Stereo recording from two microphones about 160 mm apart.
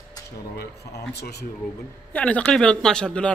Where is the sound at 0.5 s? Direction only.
90° left.